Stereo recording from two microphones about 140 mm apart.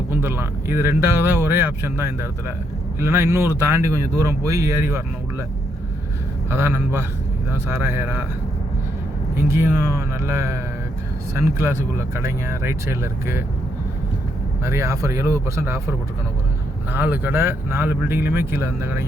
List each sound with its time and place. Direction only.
0.1 s speech: 15° right (ahead or behind)
6.5 s speech: 15° right (ahead or behind)
9.3 s speech: 20° right (ahead or behind)
14.6 s speech: 20° right (ahead or behind)